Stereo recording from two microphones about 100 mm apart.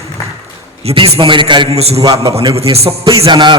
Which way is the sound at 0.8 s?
70° right (ahead or behind).